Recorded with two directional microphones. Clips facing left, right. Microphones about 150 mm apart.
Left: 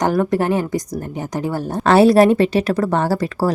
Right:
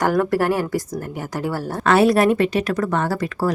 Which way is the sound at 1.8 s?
30° left (ahead or behind).